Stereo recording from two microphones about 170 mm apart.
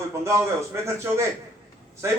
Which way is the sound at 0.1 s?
15° right (ahead or behind).